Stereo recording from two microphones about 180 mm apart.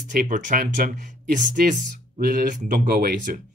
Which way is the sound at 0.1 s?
45° right (ahead or behind).